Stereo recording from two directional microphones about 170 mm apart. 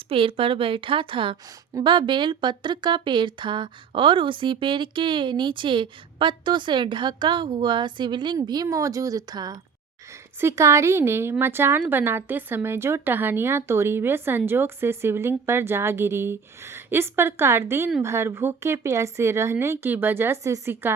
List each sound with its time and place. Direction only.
0.1 s a woman's voice: 35° right (ahead or behind); by 20.9 s 15° right (ahead or behind)